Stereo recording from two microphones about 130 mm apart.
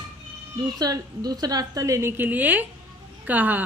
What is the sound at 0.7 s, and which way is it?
Speech, 30° right (ahead or behind).